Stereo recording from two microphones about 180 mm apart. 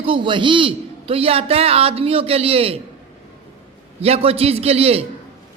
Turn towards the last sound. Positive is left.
turn(degrees=-35)  # may be behind; listen again after turning